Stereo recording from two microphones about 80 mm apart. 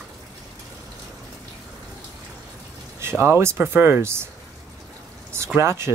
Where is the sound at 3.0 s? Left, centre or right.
Right.